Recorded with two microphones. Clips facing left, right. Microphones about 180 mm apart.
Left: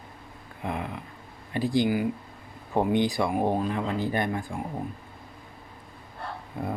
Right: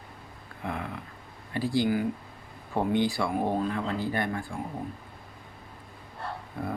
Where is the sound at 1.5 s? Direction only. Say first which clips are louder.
Left 2 dB; 20° left (ahead or behind).